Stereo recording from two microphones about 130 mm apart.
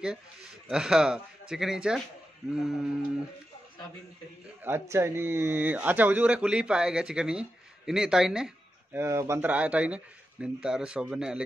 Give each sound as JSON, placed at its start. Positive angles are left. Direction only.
{"t": 0.0, "sound": "speech", "side_deg": -5}
{"t": 4.6, "sound": "speech", "side_deg": -20}
{"t": 8.9, "sound": "speech", "side_deg": -20}
{"t": 9.5, "sound": "speech", "side_deg": -10}